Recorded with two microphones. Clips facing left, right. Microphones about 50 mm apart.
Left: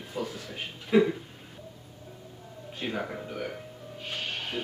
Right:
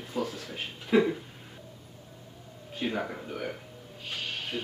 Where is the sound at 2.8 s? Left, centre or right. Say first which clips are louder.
Right 1 dB; centre.